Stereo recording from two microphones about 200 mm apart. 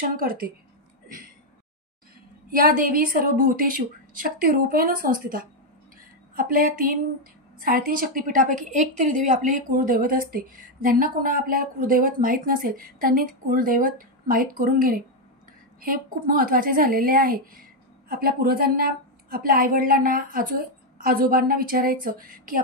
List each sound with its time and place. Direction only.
0.0 s a woman's voice: 45° right (ahead or behind)
2.5 s a woman's voice: 45° right (ahead or behind)